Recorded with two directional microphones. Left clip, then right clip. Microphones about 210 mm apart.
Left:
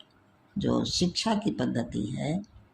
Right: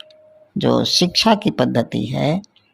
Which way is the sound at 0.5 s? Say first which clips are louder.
Right 12 dB; 40° right (ahead or behind).